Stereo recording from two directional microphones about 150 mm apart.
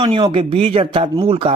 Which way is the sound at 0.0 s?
35° right (ahead or behind).